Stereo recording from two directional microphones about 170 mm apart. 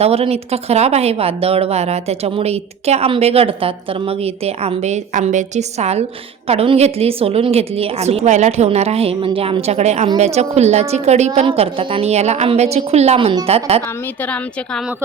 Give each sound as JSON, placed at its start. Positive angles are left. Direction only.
{"t": 0.0, "sound": "speech", "side_deg": -35}
{"t": 14.2, "sound": "a woman's voice", "side_deg": 10}